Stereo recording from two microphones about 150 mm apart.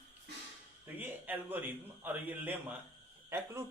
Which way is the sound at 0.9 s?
10° right (ahead or behind).